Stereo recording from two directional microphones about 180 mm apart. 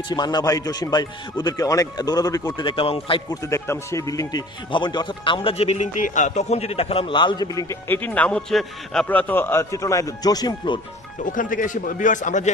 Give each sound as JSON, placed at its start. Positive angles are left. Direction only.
{"t": 0.1, "sound": "speech", "side_deg": 25}
{"t": 3.4, "sound": "speech", "side_deg": 15}
{"t": 7.9, "sound": "a man's voice", "side_deg": 10}
{"t": 11.3, "sound": "a man's voice", "side_deg": 50}